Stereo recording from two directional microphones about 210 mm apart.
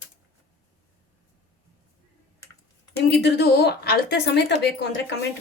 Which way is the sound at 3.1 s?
55° left (ahead or behind).